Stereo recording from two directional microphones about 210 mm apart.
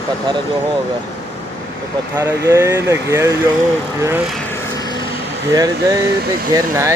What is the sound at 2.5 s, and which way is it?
Speech, 15° right (ahead or behind).